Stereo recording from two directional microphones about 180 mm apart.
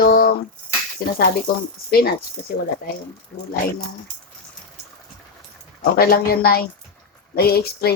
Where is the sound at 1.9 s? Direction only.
60° left (ahead or behind).